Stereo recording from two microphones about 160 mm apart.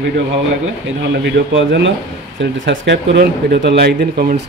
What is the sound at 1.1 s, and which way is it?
Speech, 90° right.